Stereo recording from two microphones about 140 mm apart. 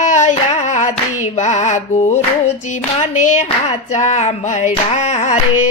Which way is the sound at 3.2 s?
60° left (ahead or behind).